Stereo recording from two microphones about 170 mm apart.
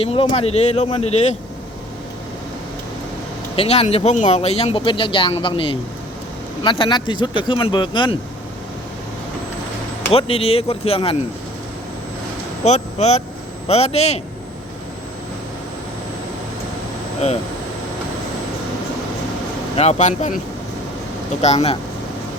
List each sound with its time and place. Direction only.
0.0 s speech: 35° left (ahead or behind)
3.5 s speech: 35° left (ahead or behind)
10.1 s speech: 35° left (ahead or behind)
12.6 s speech: 40° left (ahead or behind)
19.7 s speech: 40° left (ahead or behind)
21.4 s speech: 40° left (ahead or behind)